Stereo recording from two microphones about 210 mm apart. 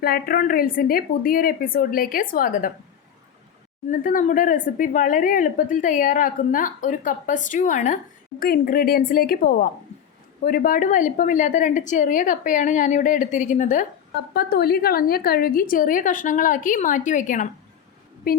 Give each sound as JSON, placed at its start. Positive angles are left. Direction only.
{"t": 0.0, "sound": "a woman's voice", "side_deg": 45}
{"t": 3.8, "sound": "a woman's voice", "side_deg": 40}
{"t": 14.3, "sound": "a woman's voice", "side_deg": 50}